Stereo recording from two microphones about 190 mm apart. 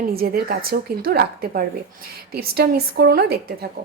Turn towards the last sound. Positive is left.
turn(degrees=-55)  # may be behind; listen again after turning